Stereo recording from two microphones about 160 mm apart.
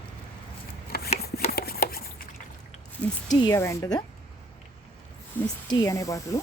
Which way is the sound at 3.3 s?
25° left (ahead or behind).